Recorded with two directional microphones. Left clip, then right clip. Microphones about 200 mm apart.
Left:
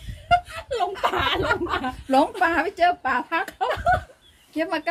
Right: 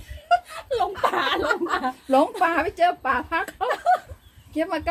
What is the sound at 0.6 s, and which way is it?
A woman's voice, 10° right (ahead or behind).